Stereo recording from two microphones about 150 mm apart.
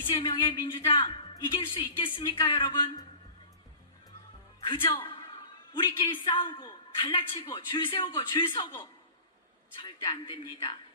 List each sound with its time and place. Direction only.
0.0 s speech: 35° left (ahead or behind)
4.6 s a man's voice: 35° left (ahead or behind)
10.0 s a man's voice: 30° left (ahead or behind)